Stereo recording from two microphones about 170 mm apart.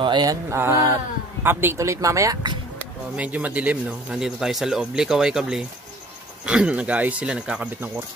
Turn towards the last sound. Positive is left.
turn(degrees=-10)  # may be behind; listen again after turning